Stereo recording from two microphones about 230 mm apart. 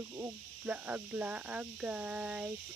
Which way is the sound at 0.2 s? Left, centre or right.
Centre.